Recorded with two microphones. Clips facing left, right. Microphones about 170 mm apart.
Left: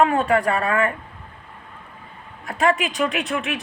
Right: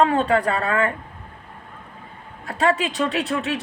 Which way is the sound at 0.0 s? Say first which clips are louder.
Even; 30° right (ahead or behind).